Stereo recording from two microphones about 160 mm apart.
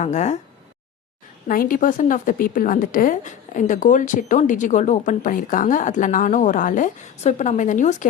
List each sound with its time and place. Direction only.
0.0 s a woman's voice: 45° left (ahead or behind)
1.5 s a woman's voice: 60° left (ahead or behind)